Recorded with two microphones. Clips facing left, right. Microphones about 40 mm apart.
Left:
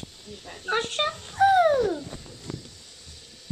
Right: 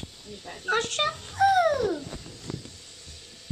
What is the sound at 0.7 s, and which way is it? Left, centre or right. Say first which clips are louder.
Speech: even; centre.